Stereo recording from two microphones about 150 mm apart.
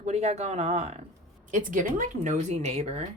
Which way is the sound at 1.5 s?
60° right (ahead or behind).